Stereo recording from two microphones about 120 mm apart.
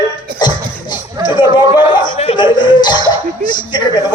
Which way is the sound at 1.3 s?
40° left (ahead or behind).